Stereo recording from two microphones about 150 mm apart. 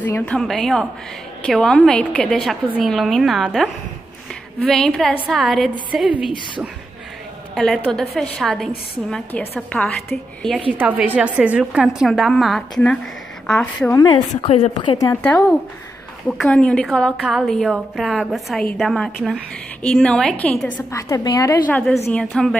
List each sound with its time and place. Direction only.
0.0 s a woman's voice: 10° left (ahead or behind); by 6.2 s 5° right (ahead or behind)
7.5 s a woman's voice: centre (ahead or behind)
10.7 s a woman's voice: 10° right (ahead or behind); by 13.9 s 5° left (ahead or behind)
14.4 s a woman's voice: 40° left (ahead or behind)
15.0 s a woman's voice: 15° left (ahead or behind)
21.1 s a woman's voice: 20° left (ahead or behind)
21.6 s a woman's voice: 10° left (ahead or behind)